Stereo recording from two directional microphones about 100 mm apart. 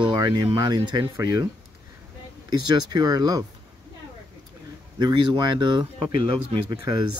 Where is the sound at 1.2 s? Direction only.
30° right (ahead or behind).